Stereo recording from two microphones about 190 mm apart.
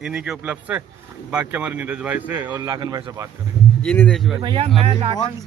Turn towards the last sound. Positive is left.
turn(degrees=-30)  # may be behind; listen again after turning